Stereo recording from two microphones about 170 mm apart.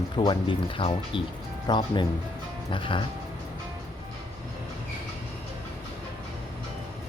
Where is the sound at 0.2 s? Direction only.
30° left (ahead or behind).